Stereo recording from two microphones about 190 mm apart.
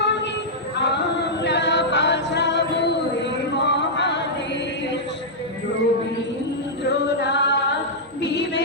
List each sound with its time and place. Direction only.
0.0 s female singing: 65° left (ahead or behind)
0.8 s chant: 65° left (ahead or behind)
6.8 s singing: 65° left (ahead or behind)
8.2 s music: 60° left (ahead or behind)